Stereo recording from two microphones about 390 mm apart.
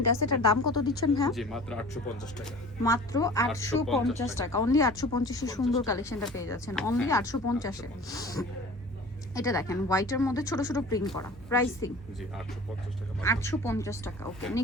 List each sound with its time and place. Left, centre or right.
0.2 s speech: left
1.1 s speech: centre
13.2 s speech: centre